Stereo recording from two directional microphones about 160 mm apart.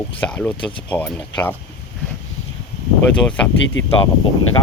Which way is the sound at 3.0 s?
10° left (ahead or behind).